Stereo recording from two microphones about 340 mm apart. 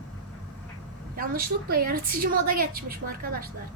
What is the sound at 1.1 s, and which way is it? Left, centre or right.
A woman's voice, right.